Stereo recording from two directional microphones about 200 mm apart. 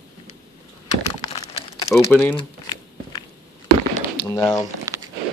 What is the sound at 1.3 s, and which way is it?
Crumpling, 30° left (ahead or behind).